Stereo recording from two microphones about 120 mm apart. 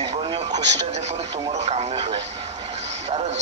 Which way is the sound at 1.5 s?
65° right (ahead or behind).